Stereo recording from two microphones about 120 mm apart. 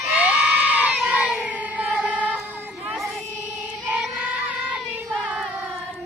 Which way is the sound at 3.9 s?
10° right (ahead or behind).